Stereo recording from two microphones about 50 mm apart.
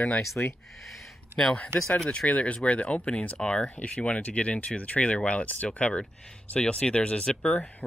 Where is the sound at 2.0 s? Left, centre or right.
Left.